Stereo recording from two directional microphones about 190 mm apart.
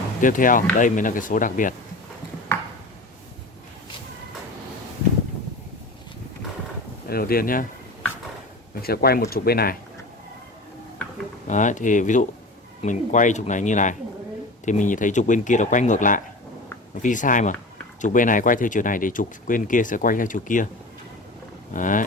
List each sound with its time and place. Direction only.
0.2 s speech: 45° left (ahead or behind)
7.1 s speech: 50° left (ahead or behind)
8.8 s speech: 55° left (ahead or behind)
11.4 s speech: 40° left (ahead or behind)
21.7 s speech: 45° left (ahead or behind)